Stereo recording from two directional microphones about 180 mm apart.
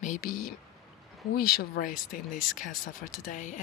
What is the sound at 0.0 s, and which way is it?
Speech, 50° left (ahead or behind).